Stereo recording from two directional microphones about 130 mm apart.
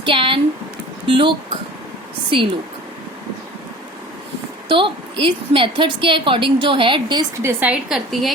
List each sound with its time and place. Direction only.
0.0 s a sound: 40° right (ahead or behind)
1.0 s a woman's voice: 40° right (ahead or behind)
4.7 s a woman's voice: 40° right (ahead or behind)
7.4 s a woman's voice: 15° right (ahead or behind)
7.9 s a woman's voice: centre (ahead or behind)